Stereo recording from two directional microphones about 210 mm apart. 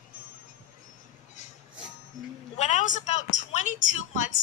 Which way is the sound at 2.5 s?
30° left (ahead or behind).